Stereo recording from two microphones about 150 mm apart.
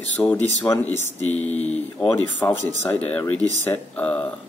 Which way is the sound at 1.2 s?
50° left (ahead or behind).